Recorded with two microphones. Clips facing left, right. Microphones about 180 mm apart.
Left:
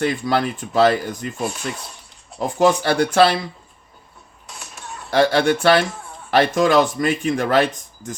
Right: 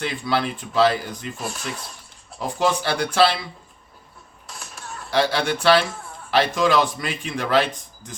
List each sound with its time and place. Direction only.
0.0 s a man's voice: 45° left (ahead or behind)
1.5 s speech: 10° left (ahead or behind)
2.4 s a man's voice: 50° left (ahead or behind)
4.5 s a sound: 5° left (ahead or behind)
5.1 s a man's voice: 50° left (ahead or behind)